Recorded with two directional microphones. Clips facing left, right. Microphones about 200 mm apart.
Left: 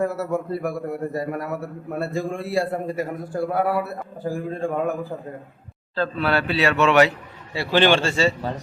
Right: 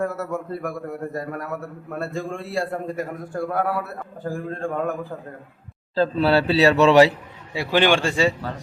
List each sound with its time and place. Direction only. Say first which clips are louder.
0.0 s a man's voice: left 2 dB; 5° left (ahead or behind)
5.9 s a man's voice: right 4 dB; 35° right (ahead or behind)
7.5 s a man's voice: left 1 dB; 15° right (ahead or behind)
8.4 s a man's voice: left 3 dB; 20° left (ahead or behind)